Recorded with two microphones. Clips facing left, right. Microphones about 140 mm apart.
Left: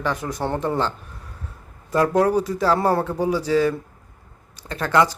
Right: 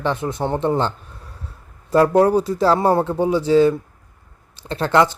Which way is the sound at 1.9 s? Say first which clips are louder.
Right 4 dB; 30° right (ahead or behind).